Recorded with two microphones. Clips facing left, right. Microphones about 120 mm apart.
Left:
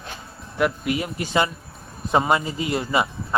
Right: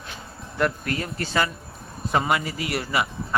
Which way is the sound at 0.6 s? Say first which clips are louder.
Left 2 dB; 10° left (ahead or behind).